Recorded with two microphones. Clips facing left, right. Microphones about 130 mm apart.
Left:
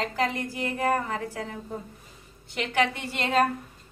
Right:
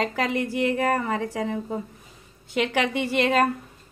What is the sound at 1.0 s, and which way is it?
Speech, 90° right.